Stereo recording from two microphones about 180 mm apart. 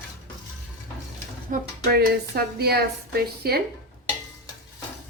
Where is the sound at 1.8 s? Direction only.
60° right (ahead or behind).